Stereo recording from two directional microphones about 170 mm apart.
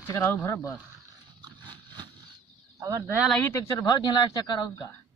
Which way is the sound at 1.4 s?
25° right (ahead or behind).